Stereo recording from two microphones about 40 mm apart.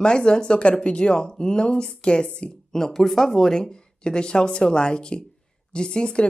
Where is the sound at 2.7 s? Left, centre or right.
Centre.